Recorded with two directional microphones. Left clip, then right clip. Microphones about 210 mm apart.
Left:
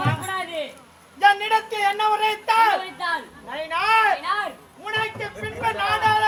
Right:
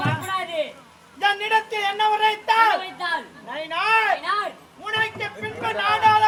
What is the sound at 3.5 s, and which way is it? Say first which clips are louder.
Speech: left 1 dB; 15° left (ahead or behind).